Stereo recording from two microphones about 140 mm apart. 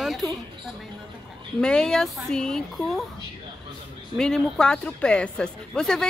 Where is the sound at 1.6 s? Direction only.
5° left (ahead or behind).